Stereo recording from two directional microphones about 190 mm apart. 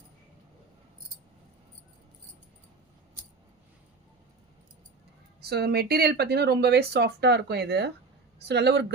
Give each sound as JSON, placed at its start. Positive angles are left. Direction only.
{"t": 5.4, "sound": "speech", "side_deg": -60}